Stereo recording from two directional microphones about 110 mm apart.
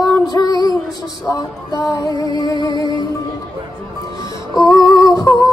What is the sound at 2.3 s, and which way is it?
Music, 35° left (ahead or behind).